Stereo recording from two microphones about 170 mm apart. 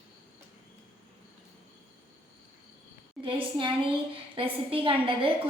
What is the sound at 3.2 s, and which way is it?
A woman's voice, 30° right (ahead or behind).